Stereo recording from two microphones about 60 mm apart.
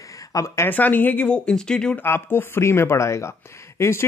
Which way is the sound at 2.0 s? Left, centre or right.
Left.